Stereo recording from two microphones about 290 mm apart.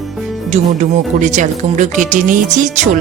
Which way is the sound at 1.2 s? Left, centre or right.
Right.